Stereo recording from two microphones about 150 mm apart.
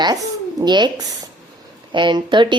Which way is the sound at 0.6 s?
30° right (ahead or behind).